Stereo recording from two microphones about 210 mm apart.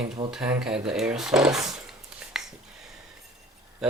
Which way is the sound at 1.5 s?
Centre (ahead or behind).